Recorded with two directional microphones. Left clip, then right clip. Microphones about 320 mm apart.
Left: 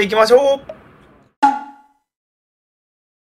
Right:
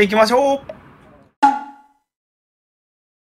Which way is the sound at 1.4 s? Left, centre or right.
Centre.